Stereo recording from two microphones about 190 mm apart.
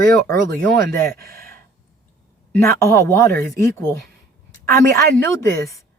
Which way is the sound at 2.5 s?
15° left (ahead or behind).